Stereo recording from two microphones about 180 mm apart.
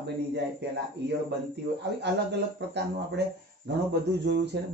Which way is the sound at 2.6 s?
70° right (ahead or behind).